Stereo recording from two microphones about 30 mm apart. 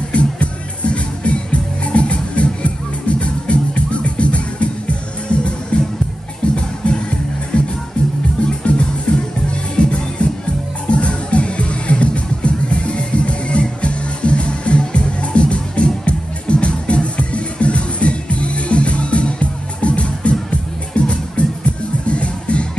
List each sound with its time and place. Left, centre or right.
0.1 s music: left
5.7 s music: left
8.6 s music: left